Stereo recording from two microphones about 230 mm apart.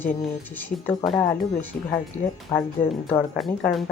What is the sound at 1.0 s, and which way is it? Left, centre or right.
Speech, left.